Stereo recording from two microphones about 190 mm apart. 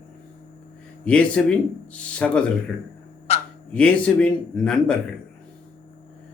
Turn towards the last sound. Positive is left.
turn(degrees=5)  # may be behind; listen again after turning